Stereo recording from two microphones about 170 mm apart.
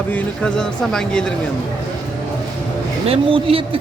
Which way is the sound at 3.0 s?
35° right (ahead or behind).